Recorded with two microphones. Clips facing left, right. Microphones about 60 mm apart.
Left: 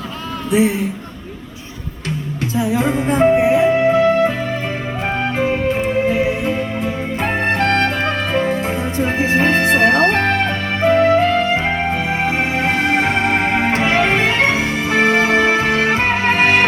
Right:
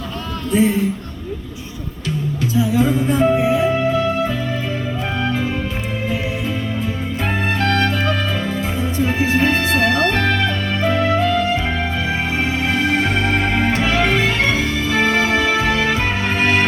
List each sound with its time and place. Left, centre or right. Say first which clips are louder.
2.4 s music: even; left